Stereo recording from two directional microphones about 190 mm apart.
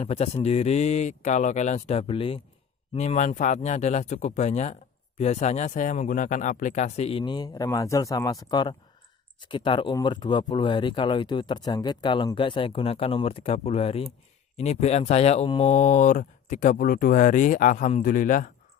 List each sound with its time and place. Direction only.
0.0 s speech: 30° left (ahead or behind)